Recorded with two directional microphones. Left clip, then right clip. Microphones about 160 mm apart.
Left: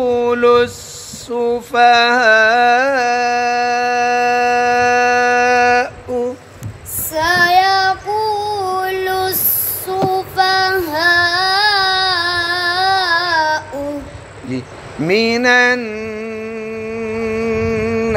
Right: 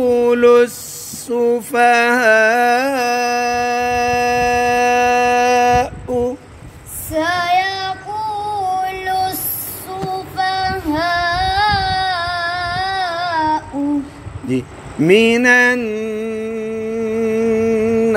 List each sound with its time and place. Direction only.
0.0 s speech: 40° right (ahead or behind)
1.3 s mantra: 40° right (ahead or behind)
7.2 s child singing: 30° left (ahead or behind)
9.8 s female singing: 30° left (ahead or behind)
15.0 s a sound: 35° right (ahead or behind)